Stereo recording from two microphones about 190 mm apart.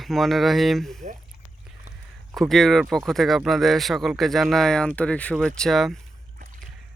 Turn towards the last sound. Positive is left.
turn(degrees=0)  # may be behind; listen again after turning